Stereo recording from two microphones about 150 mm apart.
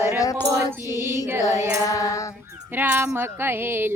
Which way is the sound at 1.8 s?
20° left (ahead or behind).